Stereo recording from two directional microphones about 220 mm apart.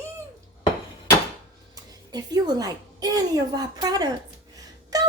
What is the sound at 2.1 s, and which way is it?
Speech, 15° right (ahead or behind).